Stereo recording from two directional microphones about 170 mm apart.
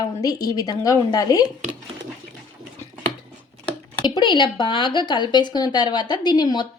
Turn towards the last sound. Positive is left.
turn(degrees=25)  # may be behind; listen again after turning